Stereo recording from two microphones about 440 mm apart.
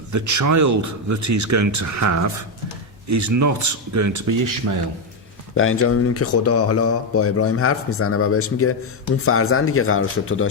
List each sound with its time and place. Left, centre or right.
0.1 s speech: right
5.5 s speech: left